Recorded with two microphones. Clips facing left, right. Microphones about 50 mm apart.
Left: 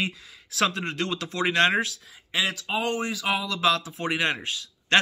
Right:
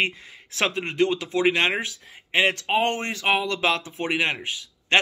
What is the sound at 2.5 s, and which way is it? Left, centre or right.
Speech, right.